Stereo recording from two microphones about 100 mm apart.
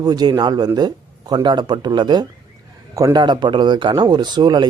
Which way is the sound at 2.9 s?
35° right (ahead or behind).